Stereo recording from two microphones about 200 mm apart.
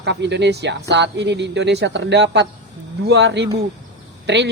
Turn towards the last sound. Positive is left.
turn(degrees=-60)  # may be behind; listen again after turning